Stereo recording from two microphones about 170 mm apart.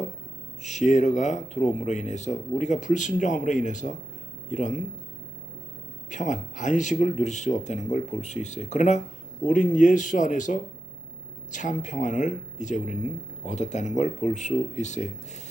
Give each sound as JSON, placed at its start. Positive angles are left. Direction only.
{"t": 0.6, "sound": "speech", "side_deg": 45}
{"t": 6.1, "sound": "speech", "side_deg": 45}